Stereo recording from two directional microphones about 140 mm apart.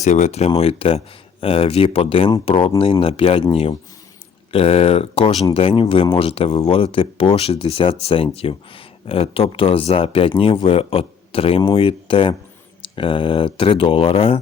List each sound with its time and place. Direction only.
0.0 s speech: 55° left (ahead or behind)